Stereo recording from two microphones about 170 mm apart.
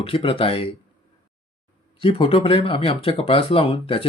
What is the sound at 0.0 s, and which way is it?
Speech, 30° left (ahead or behind).